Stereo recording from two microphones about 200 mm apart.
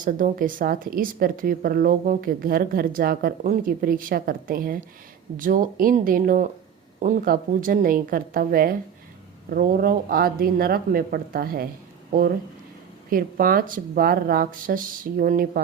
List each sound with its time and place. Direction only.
0.0 s a woman's voice: 40° right (ahead or behind)
13.1 s a woman's voice: 45° right (ahead or behind)